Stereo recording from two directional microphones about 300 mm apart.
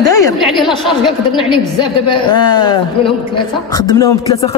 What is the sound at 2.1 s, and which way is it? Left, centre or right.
A man's voice, centre.